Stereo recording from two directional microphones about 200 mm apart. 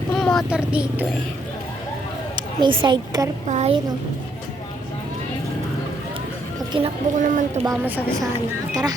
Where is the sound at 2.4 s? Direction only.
25° right (ahead or behind).